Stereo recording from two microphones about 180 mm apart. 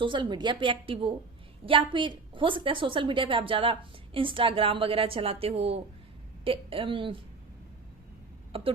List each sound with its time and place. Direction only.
0.0 s a woman's voice: 25° right (ahead or behind)
8.5 s speech: 30° right (ahead or behind)